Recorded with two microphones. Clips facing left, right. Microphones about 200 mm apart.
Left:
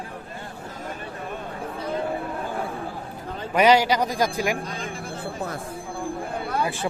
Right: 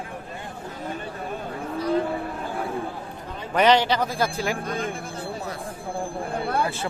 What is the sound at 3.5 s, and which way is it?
A man's voice, 10° left (ahead or behind).